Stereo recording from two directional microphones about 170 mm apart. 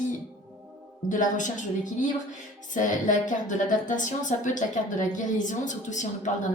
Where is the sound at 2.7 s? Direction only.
50° left (ahead or behind).